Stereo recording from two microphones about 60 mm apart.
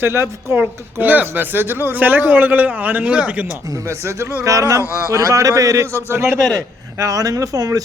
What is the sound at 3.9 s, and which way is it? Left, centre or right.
Speech, right.